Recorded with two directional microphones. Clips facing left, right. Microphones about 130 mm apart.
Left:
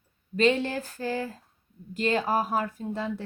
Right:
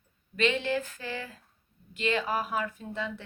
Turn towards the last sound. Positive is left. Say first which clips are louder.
# left 4 dB
turn(degrees=40)  # may be behind; listen again after turning